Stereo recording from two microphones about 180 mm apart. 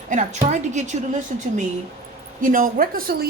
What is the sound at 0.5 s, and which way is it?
Speech, 40° right (ahead or behind).